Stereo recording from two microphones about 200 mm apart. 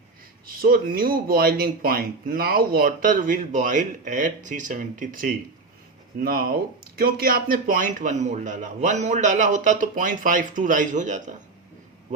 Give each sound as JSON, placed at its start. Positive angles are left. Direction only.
{"t": 0.4, "sound": "a man's voice", "side_deg": -45}